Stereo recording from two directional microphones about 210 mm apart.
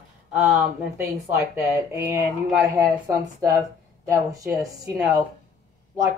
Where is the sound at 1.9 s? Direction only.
10° right (ahead or behind).